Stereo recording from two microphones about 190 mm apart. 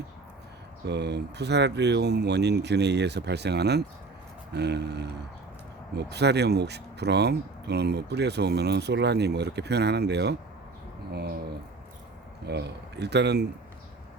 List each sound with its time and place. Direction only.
0.9 s speech: 60° right (ahead or behind)
12.5 s speech: 60° right (ahead or behind)